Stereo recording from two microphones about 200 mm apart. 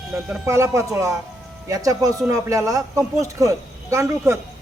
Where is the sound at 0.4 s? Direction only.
15° right (ahead or behind).